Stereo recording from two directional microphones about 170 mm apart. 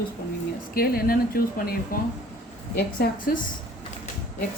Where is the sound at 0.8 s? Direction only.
60° left (ahead or behind).